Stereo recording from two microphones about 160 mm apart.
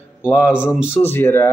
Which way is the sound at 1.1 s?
15° left (ahead or behind).